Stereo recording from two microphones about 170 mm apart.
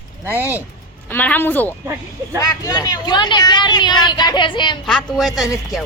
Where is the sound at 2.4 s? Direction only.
20° left (ahead or behind).